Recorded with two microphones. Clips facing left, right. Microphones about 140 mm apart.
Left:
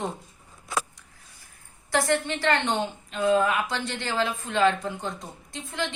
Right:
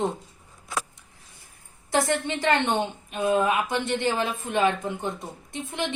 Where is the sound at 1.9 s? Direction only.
20° right (ahead or behind).